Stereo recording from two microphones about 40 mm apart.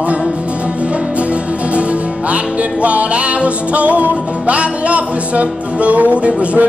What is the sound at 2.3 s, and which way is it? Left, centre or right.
Music, right.